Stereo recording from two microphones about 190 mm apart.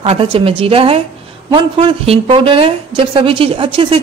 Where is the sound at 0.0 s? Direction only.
30° right (ahead or behind).